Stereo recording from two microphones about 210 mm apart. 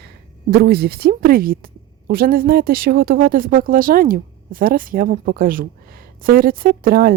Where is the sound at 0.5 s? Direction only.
50° right (ahead or behind).